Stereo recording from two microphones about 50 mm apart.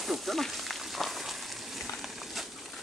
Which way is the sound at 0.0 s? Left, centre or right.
Centre.